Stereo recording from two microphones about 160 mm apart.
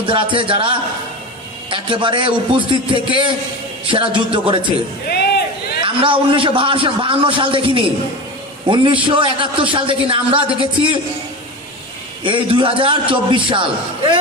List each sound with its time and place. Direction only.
0.0 s a man's voice: 30° right (ahead or behind)
5.8 s a man's voice: 35° right (ahead or behind)
12.2 s a man's voice: 30° right (ahead or behind)